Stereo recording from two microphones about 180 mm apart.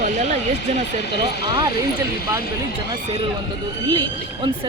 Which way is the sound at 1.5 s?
25° right (ahead or behind).